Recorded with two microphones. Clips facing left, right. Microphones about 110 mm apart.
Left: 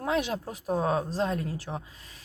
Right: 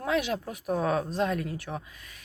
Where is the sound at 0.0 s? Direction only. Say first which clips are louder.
Even; 30° left (ahead or behind).